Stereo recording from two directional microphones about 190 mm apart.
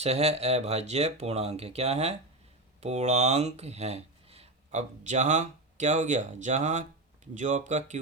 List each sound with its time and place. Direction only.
0.0 s speech: 35° right (ahead or behind)